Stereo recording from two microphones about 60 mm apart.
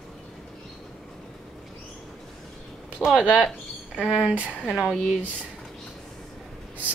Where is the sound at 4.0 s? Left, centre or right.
Centre.